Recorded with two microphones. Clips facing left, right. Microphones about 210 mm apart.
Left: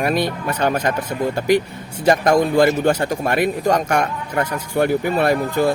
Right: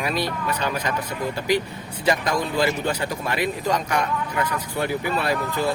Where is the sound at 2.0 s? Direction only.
50° left (ahead or behind).